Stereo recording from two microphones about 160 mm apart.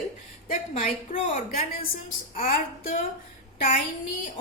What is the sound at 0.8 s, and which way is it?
A woman's voice, 50° left (ahead or behind).